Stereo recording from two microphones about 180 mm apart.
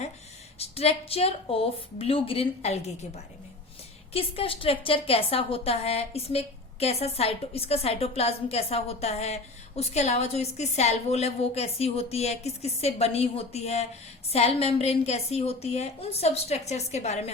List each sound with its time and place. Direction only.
0.6 s a woman's voice: 35° left (ahead or behind)
4.1 s a woman's voice: 30° left (ahead or behind)